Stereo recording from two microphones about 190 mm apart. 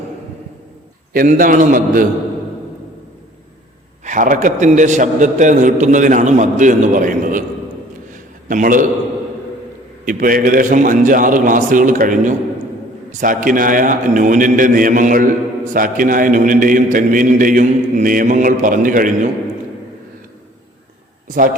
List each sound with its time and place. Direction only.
1.1 s a man's voice: 45° right (ahead or behind)
4.0 s a man's voice: 45° right (ahead or behind)
8.4 s a man's voice: 45° right (ahead or behind)
10.1 s a man's voice: 45° right (ahead or behind)